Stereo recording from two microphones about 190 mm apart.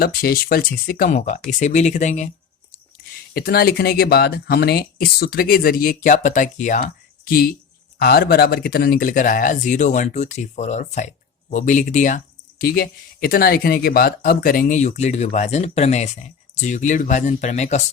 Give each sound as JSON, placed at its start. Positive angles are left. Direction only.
{"t": 0.0, "sound": "speech", "side_deg": 50}
{"t": 3.3, "sound": "speech", "side_deg": 50}